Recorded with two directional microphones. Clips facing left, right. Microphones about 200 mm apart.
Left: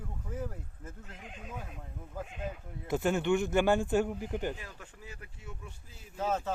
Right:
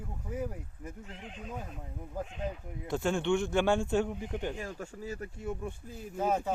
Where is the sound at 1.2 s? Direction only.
5° left (ahead or behind).